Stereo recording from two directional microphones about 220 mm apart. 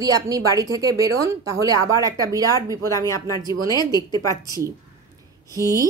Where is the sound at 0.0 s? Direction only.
15° right (ahead or behind).